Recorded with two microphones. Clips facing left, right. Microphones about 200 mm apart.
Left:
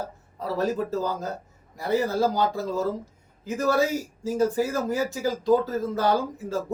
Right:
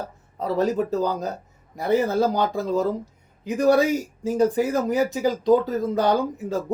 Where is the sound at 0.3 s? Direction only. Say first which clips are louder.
Right 4 dB; 20° right (ahead or behind).